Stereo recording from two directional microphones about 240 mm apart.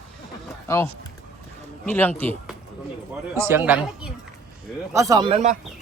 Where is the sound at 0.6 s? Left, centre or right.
Centre.